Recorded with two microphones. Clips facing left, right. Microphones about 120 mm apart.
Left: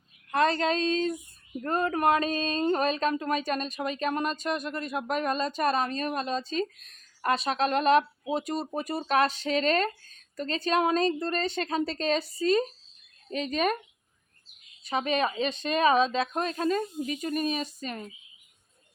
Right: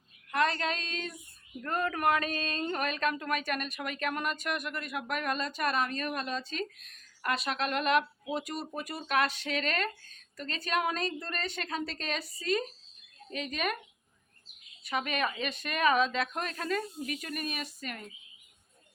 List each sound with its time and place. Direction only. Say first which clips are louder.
0.3 s speech: left 5 dB; 30° left (ahead or behind)
14.8 s speech: left 5 dB; 30° left (ahead or behind)